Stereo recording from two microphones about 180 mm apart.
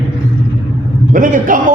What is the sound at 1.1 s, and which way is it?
Speech, 45° right (ahead or behind).